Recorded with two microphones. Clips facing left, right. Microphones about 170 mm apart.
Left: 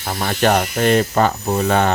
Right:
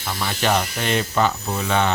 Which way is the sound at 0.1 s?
50° left (ahead or behind).